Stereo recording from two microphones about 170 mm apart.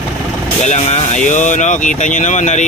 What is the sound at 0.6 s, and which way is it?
Speech, 40° left (ahead or behind).